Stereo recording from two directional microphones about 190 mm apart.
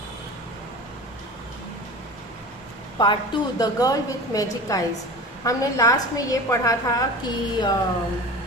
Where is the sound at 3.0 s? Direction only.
25° left (ahead or behind).